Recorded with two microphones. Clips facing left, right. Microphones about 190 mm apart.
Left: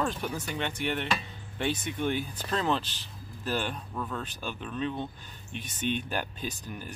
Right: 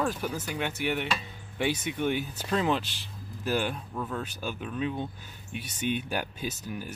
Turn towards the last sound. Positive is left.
turn(degrees=-5)  # may be behind; listen again after turning